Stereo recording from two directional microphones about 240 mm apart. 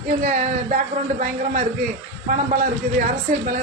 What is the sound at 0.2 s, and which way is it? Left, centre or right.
Speech, right.